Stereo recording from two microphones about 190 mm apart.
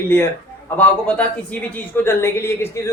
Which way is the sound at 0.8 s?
5° left (ahead or behind).